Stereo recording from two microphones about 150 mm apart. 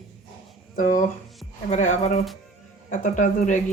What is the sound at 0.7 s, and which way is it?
Speech, 65° left (ahead or behind).